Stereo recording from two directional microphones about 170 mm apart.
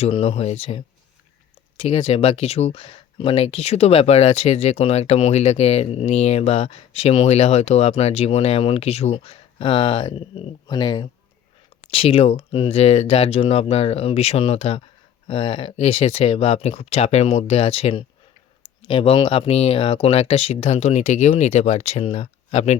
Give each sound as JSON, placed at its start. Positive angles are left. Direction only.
{"t": 0.0, "sound": "speech", "side_deg": 35}